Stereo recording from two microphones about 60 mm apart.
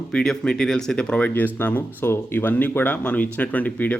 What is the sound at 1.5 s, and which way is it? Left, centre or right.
Speech, left.